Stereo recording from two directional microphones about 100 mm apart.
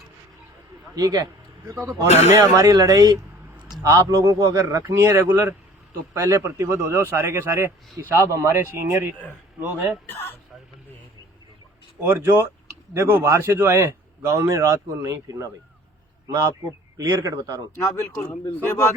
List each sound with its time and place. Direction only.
0.9 s speech: 35° right (ahead or behind)
2.0 s speech: 90° left
2.3 s a man's voice: 35° right (ahead or behind)
12.0 s a man's voice: 25° right (ahead or behind)
17.0 s speech: 35° right (ahead or behind)
17.7 s speech: 30° left (ahead or behind)